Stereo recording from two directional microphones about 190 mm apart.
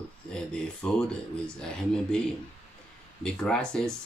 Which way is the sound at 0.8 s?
5° left (ahead or behind).